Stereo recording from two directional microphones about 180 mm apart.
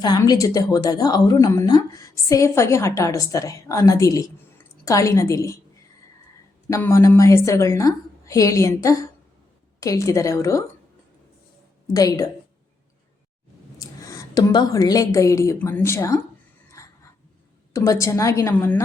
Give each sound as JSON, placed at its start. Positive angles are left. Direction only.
{"t": 0.0, "sound": "a woman's voice", "side_deg": 20}
{"t": 6.7, "sound": "a woman's voice", "side_deg": 15}
{"t": 11.9, "sound": "a woman's voice", "side_deg": 20}
{"t": 13.7, "sound": "a woman's voice", "side_deg": 20}
{"t": 16.8, "sound": "a sound", "side_deg": 15}
{"t": 17.7, "sound": "a woman's voice", "side_deg": 15}